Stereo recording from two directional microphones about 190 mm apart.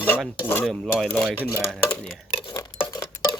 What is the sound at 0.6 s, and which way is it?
Speech, centre (ahead or behind).